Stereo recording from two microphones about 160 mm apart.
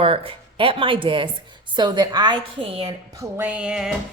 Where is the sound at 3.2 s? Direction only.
10° right (ahead or behind).